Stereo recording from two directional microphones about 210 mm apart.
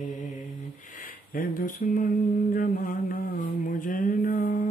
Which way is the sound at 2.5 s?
40° left (ahead or behind).